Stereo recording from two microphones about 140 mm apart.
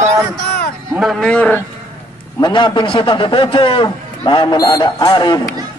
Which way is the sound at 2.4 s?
35° left (ahead or behind).